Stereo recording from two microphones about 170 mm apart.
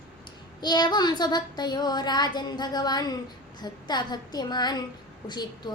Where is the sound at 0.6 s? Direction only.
25° left (ahead or behind).